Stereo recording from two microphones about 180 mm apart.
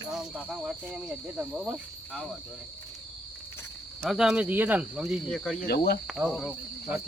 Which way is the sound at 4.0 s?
Centre (ahead or behind).